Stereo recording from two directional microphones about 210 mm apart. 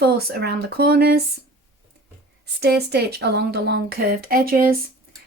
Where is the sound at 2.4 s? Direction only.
50° right (ahead or behind).